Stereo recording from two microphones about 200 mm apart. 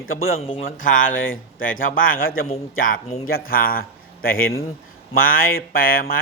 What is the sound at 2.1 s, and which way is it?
Speech, 45° left (ahead or behind).